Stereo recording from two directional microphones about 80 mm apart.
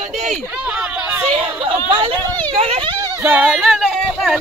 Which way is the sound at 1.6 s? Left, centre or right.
Right.